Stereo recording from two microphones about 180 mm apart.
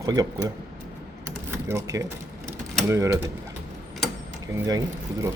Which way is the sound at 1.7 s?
15° right (ahead or behind).